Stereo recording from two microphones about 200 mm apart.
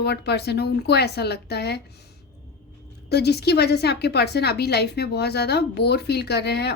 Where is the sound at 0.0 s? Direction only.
55° left (ahead or behind).